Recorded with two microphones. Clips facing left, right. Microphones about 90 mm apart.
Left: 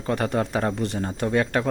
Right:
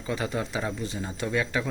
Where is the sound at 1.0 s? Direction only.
50° left (ahead or behind).